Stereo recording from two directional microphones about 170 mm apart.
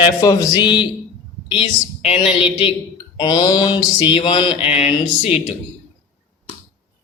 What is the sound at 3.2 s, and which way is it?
A man's voice, 25° left (ahead or behind).